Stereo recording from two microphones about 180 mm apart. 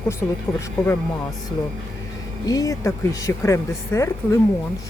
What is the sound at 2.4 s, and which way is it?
Speech, 20° left (ahead or behind).